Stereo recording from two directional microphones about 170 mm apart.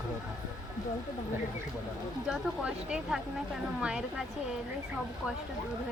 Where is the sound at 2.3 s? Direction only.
5° right (ahead or behind).